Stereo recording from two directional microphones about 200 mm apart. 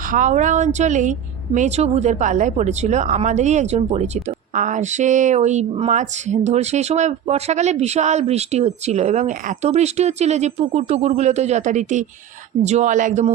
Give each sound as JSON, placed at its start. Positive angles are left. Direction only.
{"t": 0.1, "sound": "speech", "side_deg": -40}